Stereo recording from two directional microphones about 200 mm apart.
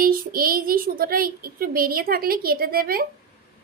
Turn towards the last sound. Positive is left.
turn(degrees=-50)  # may be behind; listen again after turning